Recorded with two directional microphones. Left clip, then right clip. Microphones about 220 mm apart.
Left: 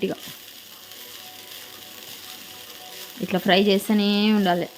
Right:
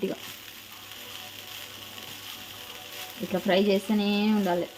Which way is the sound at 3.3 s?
25° left (ahead or behind).